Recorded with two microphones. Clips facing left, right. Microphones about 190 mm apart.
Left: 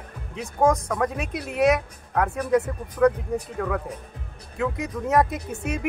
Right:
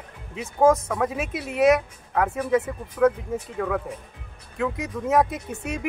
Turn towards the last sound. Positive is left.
turn(degrees=0)  # may be behind; listen again after turning